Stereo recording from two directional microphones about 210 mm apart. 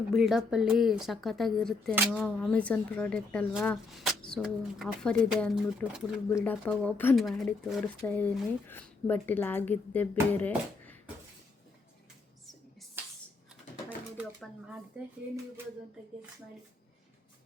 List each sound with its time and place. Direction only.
0.1 s a woman's voice: centre (ahead or behind)
14.2 s pigeon: 5° right (ahead or behind)